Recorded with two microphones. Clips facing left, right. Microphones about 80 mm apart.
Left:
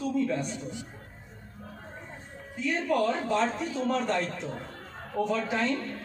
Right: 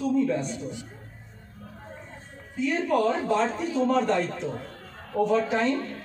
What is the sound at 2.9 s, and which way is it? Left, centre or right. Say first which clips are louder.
A man's voice: right 2 dB; centre.